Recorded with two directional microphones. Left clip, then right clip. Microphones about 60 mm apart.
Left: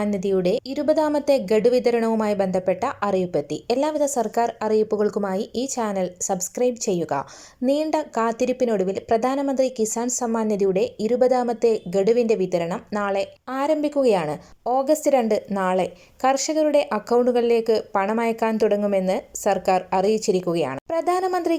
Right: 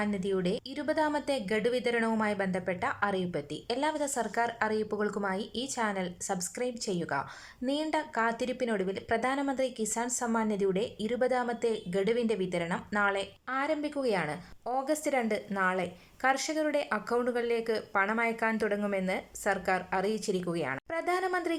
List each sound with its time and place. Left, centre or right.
0.0 s a woman's voice: left; by 13.2 s centre
13.5 s a woman's voice: left